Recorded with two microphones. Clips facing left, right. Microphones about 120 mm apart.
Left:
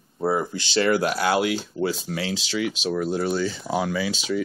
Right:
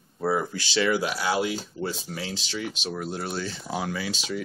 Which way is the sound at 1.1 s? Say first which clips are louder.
Left 4 dB; 65° left (ahead or behind).